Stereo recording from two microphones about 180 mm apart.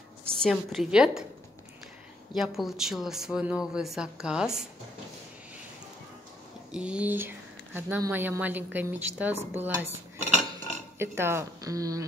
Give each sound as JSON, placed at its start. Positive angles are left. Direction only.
{"t": 0.2, "sound": "a woman's voice", "side_deg": 0}
{"t": 2.3, "sound": "speech", "side_deg": 0}
{"t": 6.7, "sound": "speech", "side_deg": -5}
{"t": 11.0, "sound": "speech", "side_deg": -15}